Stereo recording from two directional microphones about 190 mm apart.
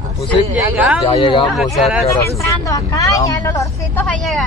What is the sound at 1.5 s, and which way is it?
Speech, centre (ahead or behind).